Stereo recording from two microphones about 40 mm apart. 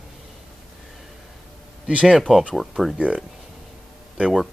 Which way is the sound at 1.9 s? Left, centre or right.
Right.